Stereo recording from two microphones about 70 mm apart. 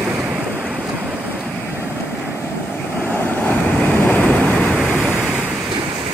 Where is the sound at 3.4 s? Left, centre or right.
Left.